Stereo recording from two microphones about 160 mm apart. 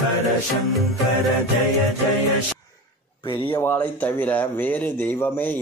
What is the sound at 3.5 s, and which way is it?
Speech, 10° left (ahead or behind).